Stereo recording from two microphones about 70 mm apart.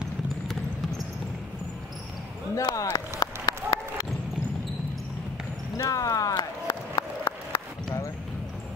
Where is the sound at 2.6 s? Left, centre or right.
Left.